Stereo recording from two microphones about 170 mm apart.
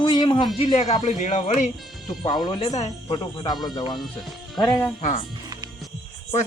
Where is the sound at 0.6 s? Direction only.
40° left (ahead or behind).